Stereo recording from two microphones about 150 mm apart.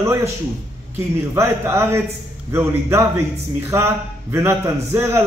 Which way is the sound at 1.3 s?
15° right (ahead or behind).